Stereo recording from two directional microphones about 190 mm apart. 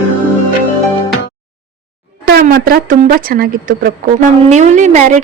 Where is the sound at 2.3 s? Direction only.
55° right (ahead or behind).